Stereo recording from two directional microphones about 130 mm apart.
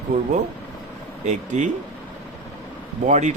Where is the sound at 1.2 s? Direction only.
65° right (ahead or behind).